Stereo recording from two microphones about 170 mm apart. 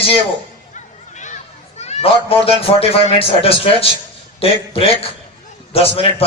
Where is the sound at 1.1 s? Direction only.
45° left (ahead or behind).